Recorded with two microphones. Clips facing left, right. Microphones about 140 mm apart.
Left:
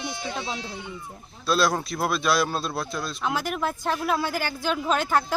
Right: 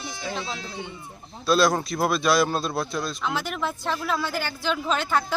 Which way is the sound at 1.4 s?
Centre (ahead or behind).